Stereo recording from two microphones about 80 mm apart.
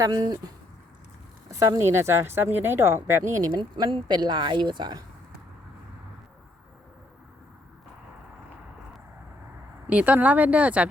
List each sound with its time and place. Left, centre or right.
0.0 s speech: right
1.5 s speech: right
1.9 s a woman's voice: right
3.6 s speech: right
9.9 s speech: centre